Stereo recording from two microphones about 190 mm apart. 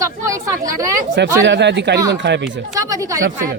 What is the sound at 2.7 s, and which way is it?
Speech, 15° right (ahead or behind).